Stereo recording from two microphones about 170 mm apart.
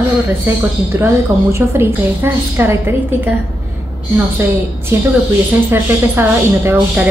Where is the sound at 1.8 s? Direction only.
15° right (ahead or behind).